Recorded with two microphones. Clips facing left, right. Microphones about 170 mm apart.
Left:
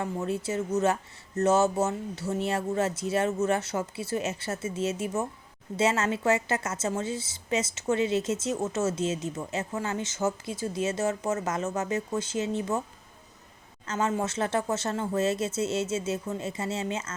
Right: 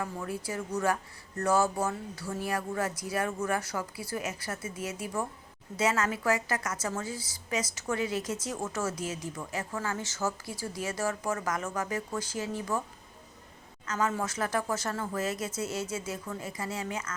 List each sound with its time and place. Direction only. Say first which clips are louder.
0.0 s a woman's voice: left 5 dB; 25° left (ahead or behind)
13.8 s a woman's voice: left 3 dB; 25° left (ahead or behind)